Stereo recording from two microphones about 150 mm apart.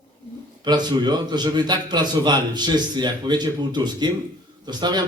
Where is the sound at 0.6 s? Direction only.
30° right (ahead or behind).